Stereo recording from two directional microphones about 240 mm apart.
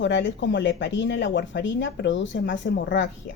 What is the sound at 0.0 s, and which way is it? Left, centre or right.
Speech, left.